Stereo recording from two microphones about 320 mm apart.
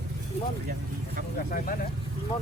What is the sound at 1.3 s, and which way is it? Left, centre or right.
Speech, left.